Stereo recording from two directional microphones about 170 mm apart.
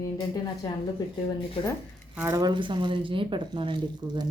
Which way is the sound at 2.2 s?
15° right (ahead or behind).